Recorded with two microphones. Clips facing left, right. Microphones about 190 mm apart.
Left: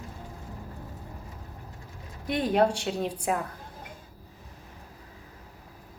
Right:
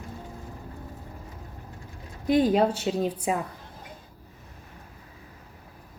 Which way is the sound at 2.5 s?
5° right (ahead or behind).